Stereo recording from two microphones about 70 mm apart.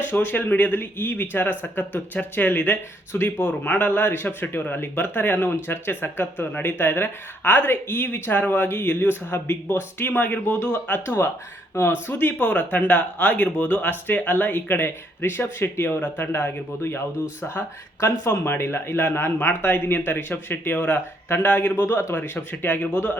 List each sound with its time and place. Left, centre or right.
0.1 s speech: left
18.0 s speech: left
21.8 s speech: left
22.1 s speech: left